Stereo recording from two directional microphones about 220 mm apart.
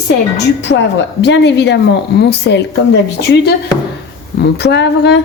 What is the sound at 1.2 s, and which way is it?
Speech, 50° left (ahead or behind).